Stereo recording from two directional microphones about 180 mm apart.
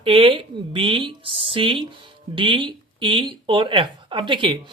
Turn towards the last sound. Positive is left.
turn(degrees=-25)  # may be behind; listen again after turning